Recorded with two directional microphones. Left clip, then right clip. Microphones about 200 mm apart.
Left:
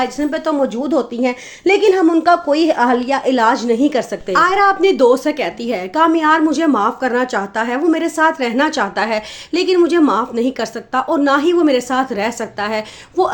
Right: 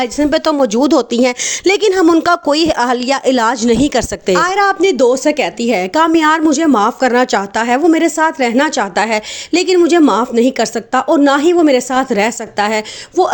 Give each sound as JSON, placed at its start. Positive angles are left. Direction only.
{"t": 0.0, "sound": "a woman's voice", "side_deg": -45}
{"t": 7.9, "sound": "a woman's voice", "side_deg": -35}